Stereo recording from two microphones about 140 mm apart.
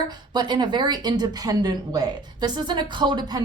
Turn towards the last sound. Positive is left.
turn(degrees=-30)  # may be behind; listen again after turning